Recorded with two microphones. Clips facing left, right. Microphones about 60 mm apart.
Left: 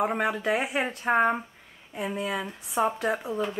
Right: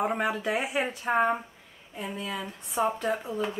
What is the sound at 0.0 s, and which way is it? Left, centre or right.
Speech, centre.